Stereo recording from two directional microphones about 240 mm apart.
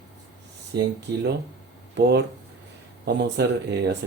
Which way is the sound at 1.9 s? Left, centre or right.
Right.